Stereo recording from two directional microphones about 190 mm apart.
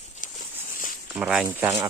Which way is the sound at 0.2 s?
45° left (ahead or behind).